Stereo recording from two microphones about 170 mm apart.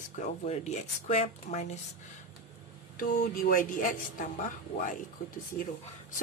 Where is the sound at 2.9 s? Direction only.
55° left (ahead or behind).